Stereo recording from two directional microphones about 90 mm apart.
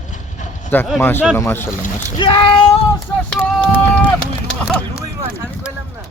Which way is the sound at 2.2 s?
65° left (ahead or behind).